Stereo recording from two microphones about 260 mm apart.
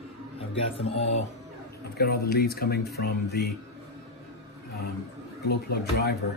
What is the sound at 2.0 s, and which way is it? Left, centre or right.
Speech, left.